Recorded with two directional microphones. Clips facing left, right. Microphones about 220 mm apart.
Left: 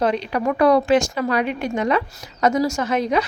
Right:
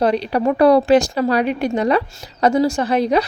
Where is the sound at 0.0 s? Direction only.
35° right (ahead or behind).